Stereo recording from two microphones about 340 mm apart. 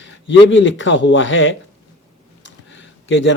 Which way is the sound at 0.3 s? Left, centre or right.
Left.